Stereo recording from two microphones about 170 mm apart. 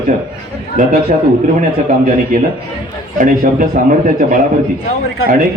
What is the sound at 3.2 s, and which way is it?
Speech, 55° right (ahead or behind).